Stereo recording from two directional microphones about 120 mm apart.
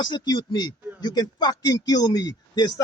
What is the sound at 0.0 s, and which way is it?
Speech, 40° left (ahead or behind).